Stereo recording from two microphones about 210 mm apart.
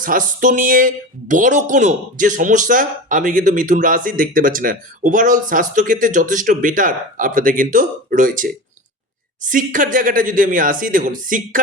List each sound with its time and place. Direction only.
0.0 s speech: 40° right (ahead or behind)